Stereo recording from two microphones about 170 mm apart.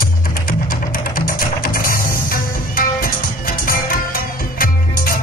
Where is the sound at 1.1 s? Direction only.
60° left (ahead or behind).